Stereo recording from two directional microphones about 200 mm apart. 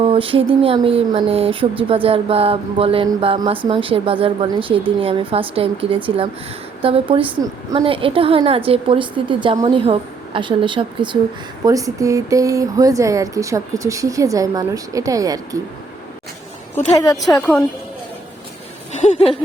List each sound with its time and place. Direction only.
0.0 s a woman's voice: 25° right (ahead or behind)
16.7 s a woman's voice: 15° left (ahead or behind)
17.2 s a woman's voice: centre (ahead or behind)
18.9 s a sound: 35° left (ahead or behind)